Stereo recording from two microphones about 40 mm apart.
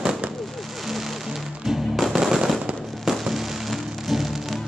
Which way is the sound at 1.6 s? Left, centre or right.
Centre.